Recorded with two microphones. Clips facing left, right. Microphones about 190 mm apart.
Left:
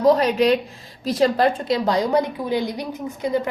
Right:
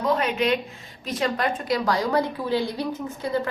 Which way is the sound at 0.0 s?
35° left (ahead or behind).